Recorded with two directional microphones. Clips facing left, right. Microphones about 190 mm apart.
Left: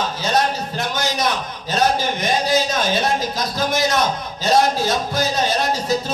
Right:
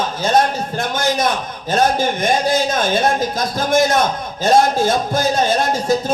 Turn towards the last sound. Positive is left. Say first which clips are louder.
# right 4 dB
turn(degrees=-50)  # may be behind; listen again after turning